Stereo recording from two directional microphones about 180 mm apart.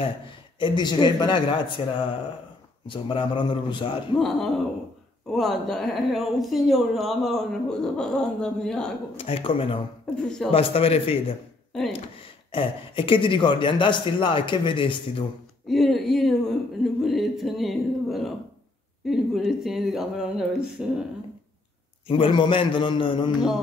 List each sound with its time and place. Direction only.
0.6 s speech: 25° left (ahead or behind)
5.3 s speech: centre (ahead or behind)
9.1 s a man's voice: 30° left (ahead or behind)
10.1 s speech: 5° left (ahead or behind)
10.5 s a man's voice: 30° left (ahead or behind)
12.4 s speech: 30° left (ahead or behind)
15.7 s speech: centre (ahead or behind)
22.1 s speech: 25° left (ahead or behind)